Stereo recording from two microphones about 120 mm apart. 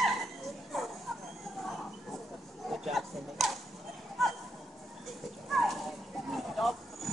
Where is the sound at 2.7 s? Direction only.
Centre (ahead or behind).